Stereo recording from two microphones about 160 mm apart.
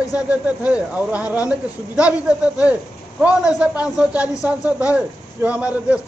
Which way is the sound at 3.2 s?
5° right (ahead or behind).